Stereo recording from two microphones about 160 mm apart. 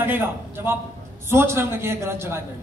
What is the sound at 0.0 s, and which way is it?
A man's voice, 15° right (ahead or behind).